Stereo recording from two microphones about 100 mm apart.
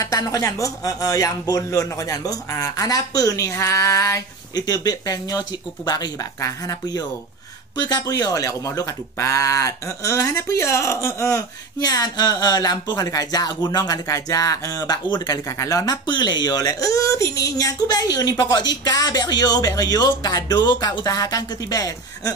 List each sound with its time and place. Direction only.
0.0 s speech: 35° left (ahead or behind)
15.4 s speech: 30° left (ahead or behind)